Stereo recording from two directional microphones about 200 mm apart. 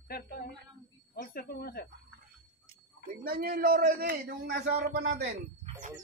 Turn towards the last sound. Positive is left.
turn(degrees=-55)  # may be behind; listen again after turning